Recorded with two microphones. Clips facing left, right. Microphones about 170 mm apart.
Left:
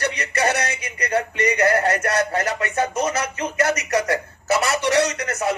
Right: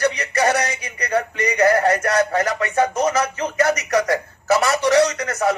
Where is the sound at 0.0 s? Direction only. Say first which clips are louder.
Right 3 dB; 25° left (ahead or behind).